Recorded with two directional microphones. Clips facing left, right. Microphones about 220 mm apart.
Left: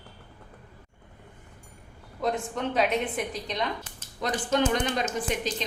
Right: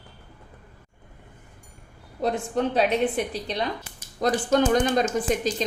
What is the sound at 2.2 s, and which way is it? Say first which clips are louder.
A woman's voice: right 4 dB; 35° right (ahead or behind).